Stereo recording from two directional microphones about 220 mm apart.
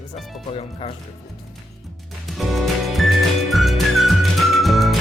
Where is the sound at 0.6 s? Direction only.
25° left (ahead or behind).